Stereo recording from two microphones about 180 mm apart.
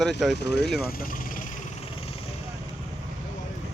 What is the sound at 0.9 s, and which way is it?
Speech, 50° left (ahead or behind).